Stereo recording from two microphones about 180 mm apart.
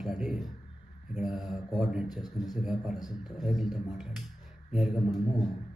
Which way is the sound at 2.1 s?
20° left (ahead or behind).